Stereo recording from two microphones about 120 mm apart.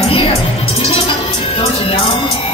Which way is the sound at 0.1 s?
55° left (ahead or behind).